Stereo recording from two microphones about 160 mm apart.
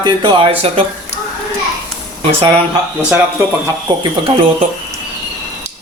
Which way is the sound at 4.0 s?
35° right (ahead or behind).